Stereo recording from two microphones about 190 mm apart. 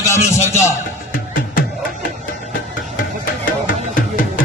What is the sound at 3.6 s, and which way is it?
Music, 45° left (ahead or behind).